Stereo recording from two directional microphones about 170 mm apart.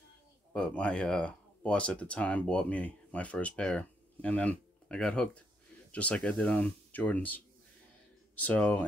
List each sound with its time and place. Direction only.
0.5 s speech: 5° left (ahead or behind)